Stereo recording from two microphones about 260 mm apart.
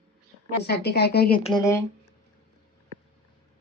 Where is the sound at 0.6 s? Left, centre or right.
Left.